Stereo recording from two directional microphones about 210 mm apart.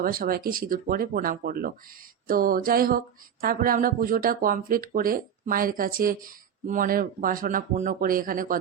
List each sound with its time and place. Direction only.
0.0 s speech: 45° right (ahead or behind)